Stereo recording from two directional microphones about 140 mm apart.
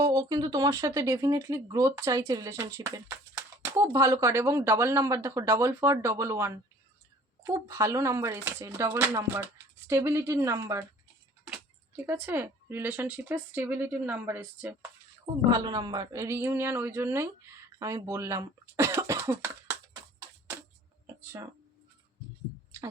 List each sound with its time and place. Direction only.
0.0 s speech: 25° right (ahead or behind)
12.0 s speech: 15° right (ahead or behind)
15.4 s speech: 30° right (ahead or behind)